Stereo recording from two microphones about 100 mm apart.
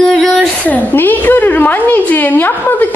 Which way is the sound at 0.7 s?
15° left (ahead or behind).